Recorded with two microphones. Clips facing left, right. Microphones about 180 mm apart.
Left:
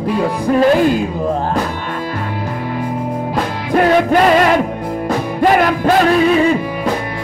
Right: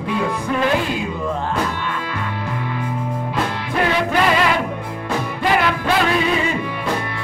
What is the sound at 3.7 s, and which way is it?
Music, 45° left (ahead or behind).